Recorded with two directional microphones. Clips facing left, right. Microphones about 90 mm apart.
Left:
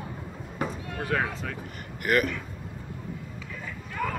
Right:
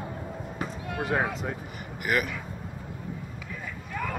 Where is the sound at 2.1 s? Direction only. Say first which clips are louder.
Left 3 dB; 10° right (ahead or behind).